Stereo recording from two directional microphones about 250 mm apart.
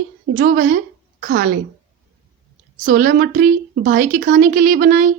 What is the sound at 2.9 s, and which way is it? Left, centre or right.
Speech, right.